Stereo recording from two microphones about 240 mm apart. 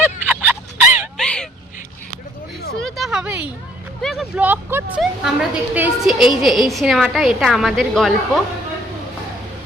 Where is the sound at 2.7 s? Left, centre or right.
Centre.